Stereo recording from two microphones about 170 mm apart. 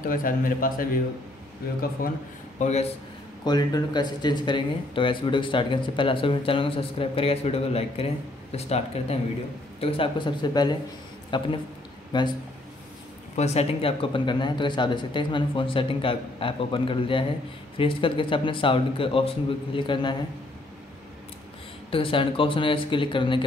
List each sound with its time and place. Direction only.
0.1 s a man's voice: 55° left (ahead or behind)
2.6 s speech: 40° left (ahead or behind)
3.4 s a man's voice: 25° left (ahead or behind)
13.4 s speech: 40° left (ahead or behind)
21.9 s speech: 30° left (ahead or behind)